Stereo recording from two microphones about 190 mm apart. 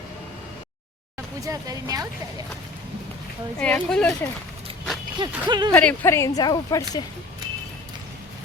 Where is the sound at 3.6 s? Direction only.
5° left (ahead or behind).